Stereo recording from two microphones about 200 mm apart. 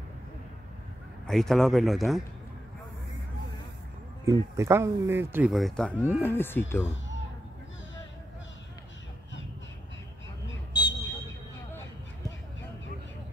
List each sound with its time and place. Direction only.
1.2 s speech: centre (ahead or behind)
4.3 s speech: 15° right (ahead or behind); by 6.9 s 10° left (ahead or behind)
10.7 s a sound: 20° left (ahead or behind)